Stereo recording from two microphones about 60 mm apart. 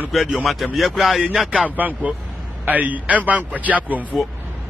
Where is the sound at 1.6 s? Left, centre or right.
Right.